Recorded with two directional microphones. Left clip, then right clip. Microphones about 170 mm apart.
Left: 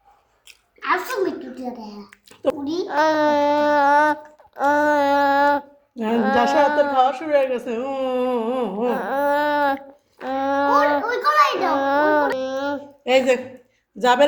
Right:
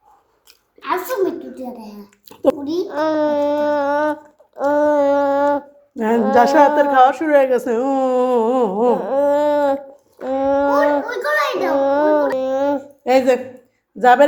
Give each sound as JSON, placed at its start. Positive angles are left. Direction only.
{"t": 0.8, "sound": "a child's voice", "side_deg": -15}
{"t": 1.8, "sound": "a child's voice", "side_deg": -30}
{"t": 2.9, "sound": "child singing", "side_deg": 15}
{"t": 6.3, "sound": "a woman's voice", "side_deg": -25}
{"t": 8.9, "sound": "a sound", "side_deg": 0}
{"t": 11.0, "sound": "child singing", "side_deg": -15}
{"t": 11.7, "sound": "a sound", "side_deg": 0}
{"t": 14.0, "sound": "speech", "side_deg": -10}